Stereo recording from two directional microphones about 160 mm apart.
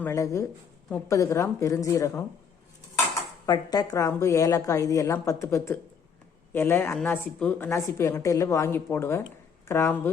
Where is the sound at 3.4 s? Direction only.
25° left (ahead or behind).